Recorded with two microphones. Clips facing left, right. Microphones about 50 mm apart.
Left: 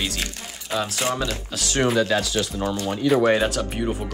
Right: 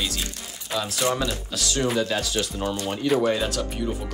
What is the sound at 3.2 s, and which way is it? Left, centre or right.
Speech, left.